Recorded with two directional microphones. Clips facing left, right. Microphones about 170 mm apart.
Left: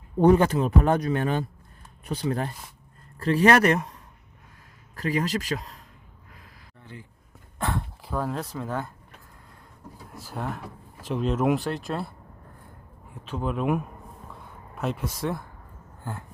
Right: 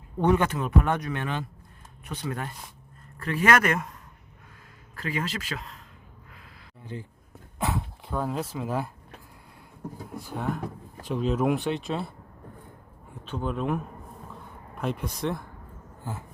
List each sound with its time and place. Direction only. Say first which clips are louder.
0.2 s speech: left 5 dB; 35° left (ahead or behind)
4.9 s speech: left 5 dB; 40° left (ahead or behind)
7.6 s speech: even; 5° right (ahead or behind)
10.2 s speech: right 2 dB; centre (ahead or behind)
13.2 s speech: left 2 dB; 5° left (ahead or behind)